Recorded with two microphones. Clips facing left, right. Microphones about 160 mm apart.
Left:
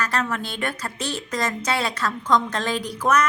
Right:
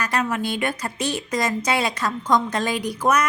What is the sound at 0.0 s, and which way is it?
Speech, 15° right (ahead or behind).